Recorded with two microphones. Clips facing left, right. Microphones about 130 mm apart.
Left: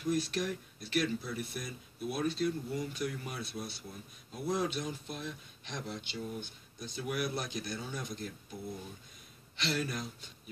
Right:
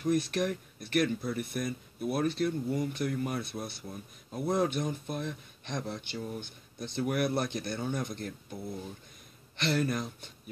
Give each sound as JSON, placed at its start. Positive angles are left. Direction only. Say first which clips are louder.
{"t": 0.1, "sound": "speech", "louder": "right 4 dB", "side_deg": -55}
{"t": 9.6, "sound": "speech", "louder": "right 6 dB", "side_deg": -55}